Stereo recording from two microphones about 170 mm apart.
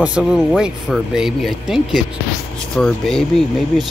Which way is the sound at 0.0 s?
5° right (ahead or behind).